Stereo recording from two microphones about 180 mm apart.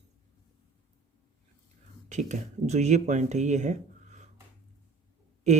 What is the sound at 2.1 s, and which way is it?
Speech, 40° right (ahead or behind).